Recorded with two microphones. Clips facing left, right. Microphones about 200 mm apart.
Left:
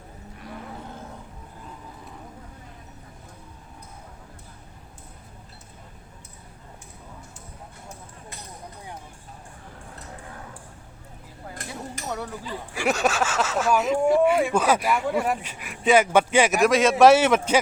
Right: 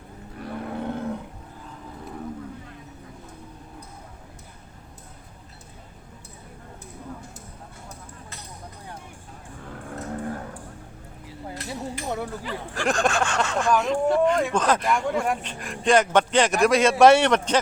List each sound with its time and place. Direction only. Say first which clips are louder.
0.4 s cattle: right 8 dB; 60° right (ahead or behind)
11.5 s a sound: right 4 dB; 50° left (ahead or behind)
12.7 s a man's voice: even; 5° left (ahead or behind)